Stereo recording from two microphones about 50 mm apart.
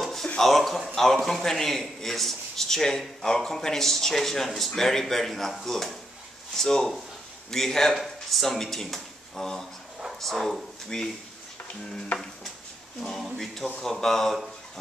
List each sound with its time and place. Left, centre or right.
0.0 s a sound: centre
0.4 s a man's voice: centre
10.9 s speech: centre
13.0 s speech: centre